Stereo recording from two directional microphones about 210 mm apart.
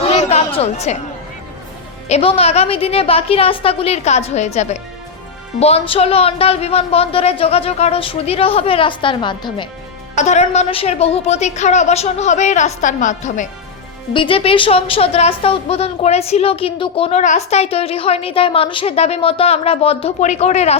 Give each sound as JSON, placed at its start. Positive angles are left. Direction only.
{"t": 0.1, "sound": "chatter", "side_deg": 30}
{"t": 2.0, "sound": "a woman's voice", "side_deg": 30}
{"t": 10.2, "sound": "a woman's voice", "side_deg": 35}
{"t": 14.1, "sound": "a woman's voice", "side_deg": 25}